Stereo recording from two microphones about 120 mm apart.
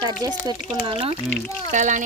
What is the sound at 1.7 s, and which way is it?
Speech, 90° right.